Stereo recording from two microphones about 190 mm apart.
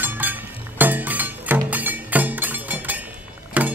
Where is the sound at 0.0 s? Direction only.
10° right (ahead or behind).